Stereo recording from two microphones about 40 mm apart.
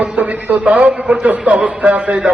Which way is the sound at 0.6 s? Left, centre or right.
Right.